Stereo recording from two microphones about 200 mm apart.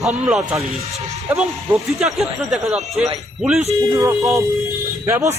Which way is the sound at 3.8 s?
15° right (ahead or behind).